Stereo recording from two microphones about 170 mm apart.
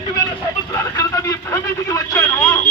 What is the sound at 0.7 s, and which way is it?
Vehicle, 15° left (ahead or behind).